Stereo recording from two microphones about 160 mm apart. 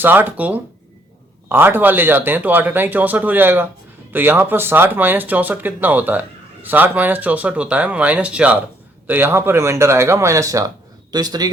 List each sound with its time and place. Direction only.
0.0 s speech: 10° right (ahead or behind)